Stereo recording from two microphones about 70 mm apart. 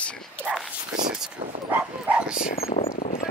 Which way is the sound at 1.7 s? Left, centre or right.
Right.